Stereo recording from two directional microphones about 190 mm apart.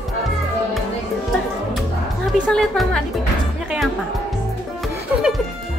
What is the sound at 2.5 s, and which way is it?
Speech, 5° left (ahead or behind).